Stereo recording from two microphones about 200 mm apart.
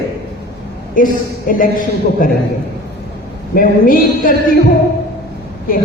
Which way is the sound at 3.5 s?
45° left (ahead or behind).